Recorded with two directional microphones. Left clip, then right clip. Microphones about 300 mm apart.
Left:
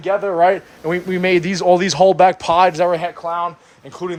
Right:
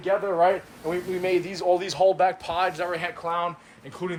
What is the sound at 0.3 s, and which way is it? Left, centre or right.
Speech, left.